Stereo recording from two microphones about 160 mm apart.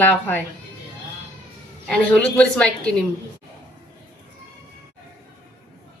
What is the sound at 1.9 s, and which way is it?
Speech, 5° left (ahead or behind).